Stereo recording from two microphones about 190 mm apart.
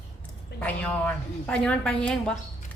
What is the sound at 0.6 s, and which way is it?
A woman's voice, 5° left (ahead or behind).